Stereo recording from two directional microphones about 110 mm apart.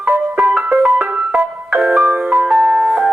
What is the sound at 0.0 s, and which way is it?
Music, 5° right (ahead or behind).